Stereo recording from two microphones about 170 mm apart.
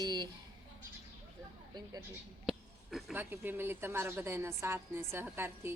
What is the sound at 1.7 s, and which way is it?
Speech, 20° right (ahead or behind).